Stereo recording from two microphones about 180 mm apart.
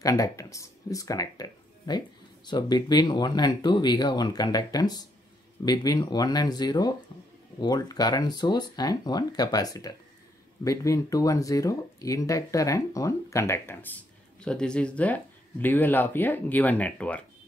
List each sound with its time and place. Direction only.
0.0 s speech: 20° left (ahead or behind)